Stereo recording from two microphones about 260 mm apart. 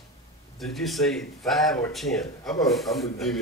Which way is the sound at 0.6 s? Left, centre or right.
Centre.